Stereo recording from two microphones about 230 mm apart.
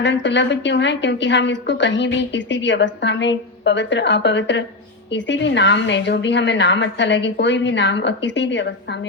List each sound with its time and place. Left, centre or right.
0.0 s a woman's voice: left